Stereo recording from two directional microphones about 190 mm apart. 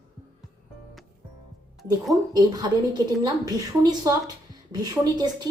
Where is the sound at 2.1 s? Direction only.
20° right (ahead or behind).